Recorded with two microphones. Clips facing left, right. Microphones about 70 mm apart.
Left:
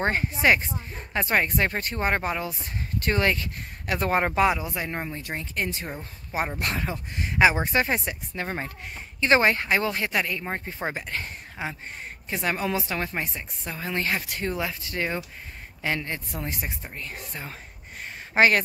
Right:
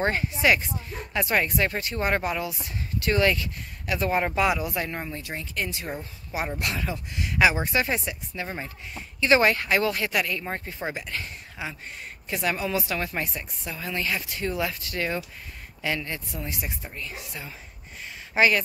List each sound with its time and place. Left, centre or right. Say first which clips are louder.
0.0 s speech: left 1 dB; left
4.2 s a woman's voice: left 1 dB; left
5.3 s speech: left 2 dB; left
9.2 s a woman's voice: even; left
13.7 s speech: left 2 dB; left
14.0 s speech: left 1 dB; left
14.4 s a woman's voice: right 1 dB; left
16.3 s speech: left 1 dB; left
18.0 s a sound: left 2 dB; left